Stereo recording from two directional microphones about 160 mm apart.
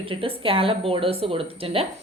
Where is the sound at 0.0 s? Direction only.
35° right (ahead or behind).